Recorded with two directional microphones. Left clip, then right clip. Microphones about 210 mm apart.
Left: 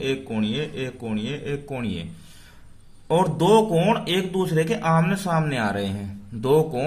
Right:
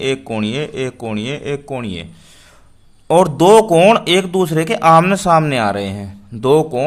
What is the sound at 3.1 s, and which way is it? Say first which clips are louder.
Speech: right 9 dB; 35° right (ahead or behind).